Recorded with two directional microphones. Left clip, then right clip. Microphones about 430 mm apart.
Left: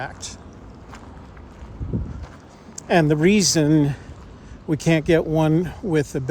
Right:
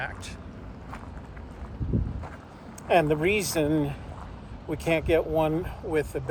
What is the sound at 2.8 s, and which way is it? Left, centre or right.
Speech, left.